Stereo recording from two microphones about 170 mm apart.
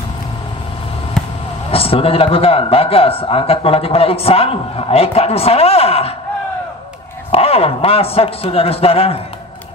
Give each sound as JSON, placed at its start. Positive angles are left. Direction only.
{"t": 1.7, "sound": "a man's voice", "side_deg": 35}
{"t": 7.2, "sound": "a man's voice", "side_deg": 35}